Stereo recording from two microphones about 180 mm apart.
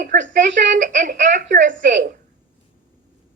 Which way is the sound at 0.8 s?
45° right (ahead or behind).